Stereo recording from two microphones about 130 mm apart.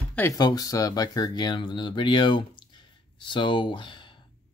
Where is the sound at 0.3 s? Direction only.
30° left (ahead or behind).